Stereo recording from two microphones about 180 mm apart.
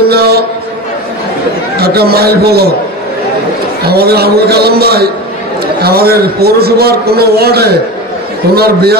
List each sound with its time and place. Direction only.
0.1 s a sound: 60° right (ahead or behind)
1.8 s a man's voice: 60° right (ahead or behind)
3.8 s a man's voice: 60° right (ahead or behind)